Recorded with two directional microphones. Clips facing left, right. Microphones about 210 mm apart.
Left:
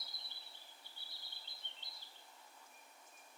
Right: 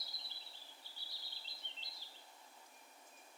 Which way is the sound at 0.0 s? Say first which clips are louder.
Right 1 dB; 55° left (ahead or behind).